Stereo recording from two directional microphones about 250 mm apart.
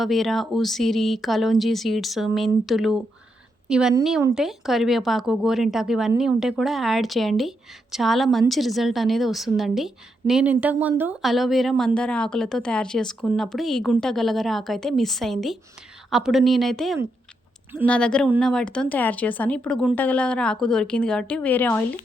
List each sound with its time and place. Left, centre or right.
0.0 s a woman's voice: centre